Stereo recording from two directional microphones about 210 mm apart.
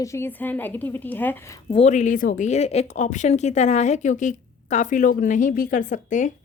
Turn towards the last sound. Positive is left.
turn(degrees=35)  # may be behind; listen again after turning